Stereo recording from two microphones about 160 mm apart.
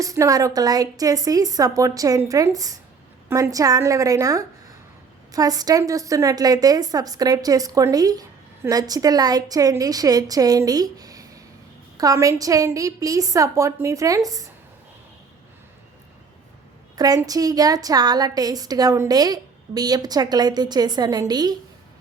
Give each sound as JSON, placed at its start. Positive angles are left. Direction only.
{"t": 0.0, "sound": "a woman's voice", "side_deg": -20}
{"t": 16.9, "sound": "a woman's voice", "side_deg": -25}